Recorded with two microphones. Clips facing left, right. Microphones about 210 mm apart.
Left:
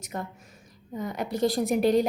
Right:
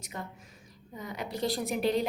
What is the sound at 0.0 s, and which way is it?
A woman's voice, 55° left (ahead or behind).